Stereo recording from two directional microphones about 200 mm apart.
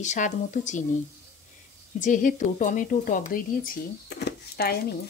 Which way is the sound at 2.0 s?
40° left (ahead or behind).